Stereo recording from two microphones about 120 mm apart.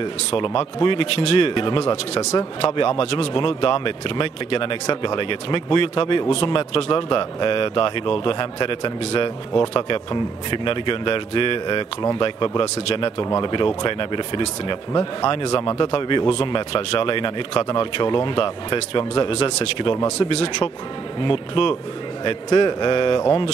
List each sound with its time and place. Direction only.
0.3 s speech: 45° left (ahead or behind); by 15.3 s 30° left (ahead or behind)
15.3 s speech: 45° left (ahead or behind)
20.2 s speech: 55° left (ahead or behind)